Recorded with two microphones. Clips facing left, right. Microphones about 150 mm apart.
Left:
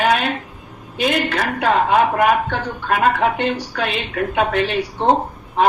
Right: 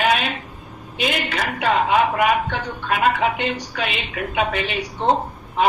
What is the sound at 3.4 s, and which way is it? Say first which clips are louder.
A woman's voice: left 4 dB; 5° right (ahead or behind).